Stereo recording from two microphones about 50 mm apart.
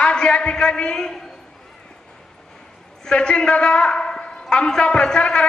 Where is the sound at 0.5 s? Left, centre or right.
Centre.